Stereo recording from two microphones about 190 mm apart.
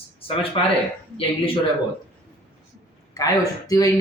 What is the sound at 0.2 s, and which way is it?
Speech, 30° left (ahead or behind).